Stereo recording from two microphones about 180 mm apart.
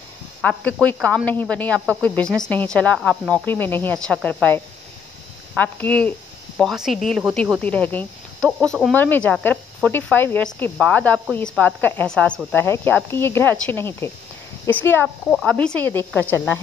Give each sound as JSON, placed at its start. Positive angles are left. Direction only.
{"t": 0.4, "sound": "speech", "side_deg": 5}
{"t": 5.6, "sound": "speech", "side_deg": 10}